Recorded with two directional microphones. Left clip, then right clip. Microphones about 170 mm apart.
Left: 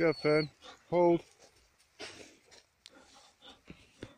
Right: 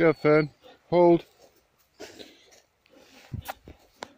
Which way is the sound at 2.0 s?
15° right (ahead or behind).